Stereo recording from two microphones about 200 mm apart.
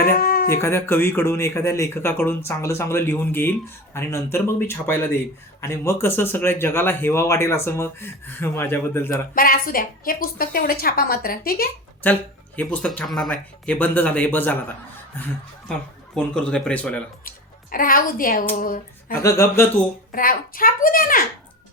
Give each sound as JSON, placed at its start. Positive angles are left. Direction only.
{"t": 0.0, "sound": "a sound", "side_deg": 45}
{"t": 0.6, "sound": "a man's voice", "side_deg": 15}
{"t": 9.3, "sound": "a woman's voice", "side_deg": 45}
{"t": 12.0, "sound": "a man's voice", "side_deg": 10}
{"t": 16.1, "sound": "speech", "side_deg": 5}
{"t": 17.2, "sound": "speech", "side_deg": 45}
{"t": 19.2, "sound": "a man's voice", "side_deg": 15}
{"t": 20.1, "sound": "a woman's voice", "side_deg": 45}